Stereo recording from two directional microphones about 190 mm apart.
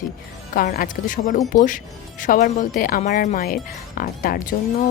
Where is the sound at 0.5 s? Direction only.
45° left (ahead or behind).